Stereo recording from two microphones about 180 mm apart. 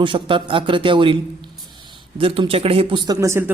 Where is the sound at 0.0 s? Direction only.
30° right (ahead or behind).